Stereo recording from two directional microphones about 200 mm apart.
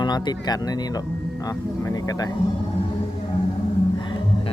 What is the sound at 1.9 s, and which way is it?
Vehicle, 20° left (ahead or behind).